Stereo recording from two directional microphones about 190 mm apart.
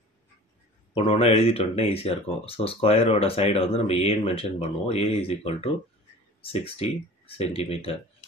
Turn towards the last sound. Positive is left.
turn(degrees=30)  # may be behind; listen again after turning